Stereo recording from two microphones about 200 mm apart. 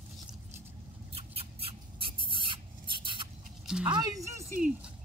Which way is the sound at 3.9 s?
15° right (ahead or behind).